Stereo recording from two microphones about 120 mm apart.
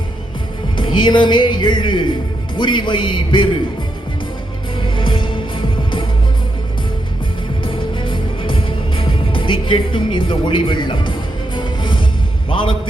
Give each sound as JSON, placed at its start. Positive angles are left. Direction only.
{"t": 0.8, "sound": "speech", "side_deg": 40}
{"t": 4.9, "sound": "music", "side_deg": 45}
{"t": 7.6, "sound": "music", "side_deg": 45}
{"t": 12.5, "sound": "a man's voice", "side_deg": 45}